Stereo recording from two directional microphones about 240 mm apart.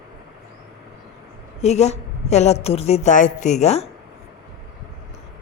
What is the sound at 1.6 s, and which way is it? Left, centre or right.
A woman's voice, left.